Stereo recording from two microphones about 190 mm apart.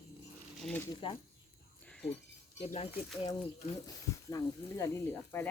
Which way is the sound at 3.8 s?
20° left (ahead or behind).